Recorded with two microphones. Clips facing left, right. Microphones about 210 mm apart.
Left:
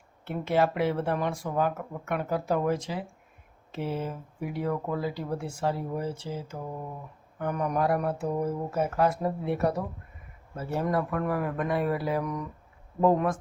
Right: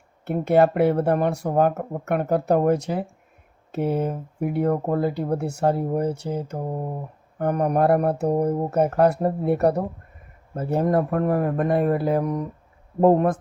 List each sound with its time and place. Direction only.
0.3 s speech: 45° right (ahead or behind)
1.5 s speech: 45° right (ahead or behind)
10.6 s speech: 40° right (ahead or behind)